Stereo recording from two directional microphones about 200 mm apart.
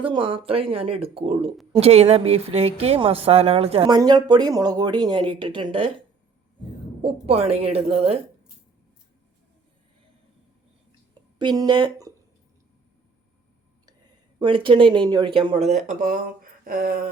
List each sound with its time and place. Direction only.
0.0 s speech: 25° right (ahead or behind)
7.0 s a woman's voice: 30° right (ahead or behind)
11.3 s speech: 20° right (ahead or behind)
14.3 s speech: 25° right (ahead or behind)
15.9 s speech: 45° right (ahead or behind)